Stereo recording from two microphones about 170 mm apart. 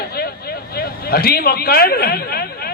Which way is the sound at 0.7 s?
65° left (ahead or behind).